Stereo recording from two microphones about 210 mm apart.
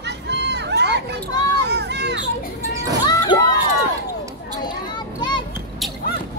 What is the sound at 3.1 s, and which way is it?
Children shouting, 20° left (ahead or behind).